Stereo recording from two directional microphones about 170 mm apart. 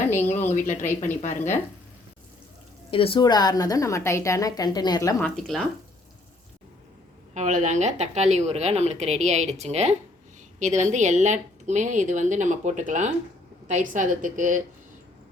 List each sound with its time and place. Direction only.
0.1 s a sound: 15° left (ahead or behind)
0.5 s speech: 50° left (ahead or behind)
2.9 s a woman's voice: 30° left (ahead or behind)
5.2 s speech: centre (ahead or behind)
7.3 s a woman's voice: 45° right (ahead or behind)